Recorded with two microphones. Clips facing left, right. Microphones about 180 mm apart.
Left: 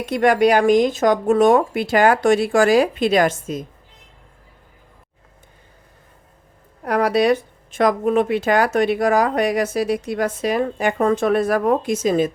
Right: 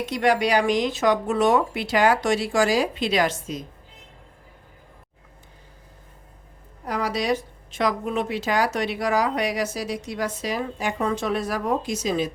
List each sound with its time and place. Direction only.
0.0 s a woman's voice: 55° left (ahead or behind)
6.8 s a woman's voice: 60° left (ahead or behind)